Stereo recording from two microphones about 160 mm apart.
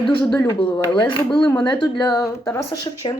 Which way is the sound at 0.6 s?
30° left (ahead or behind).